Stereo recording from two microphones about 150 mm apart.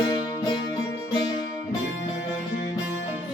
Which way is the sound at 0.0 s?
35° left (ahead or behind).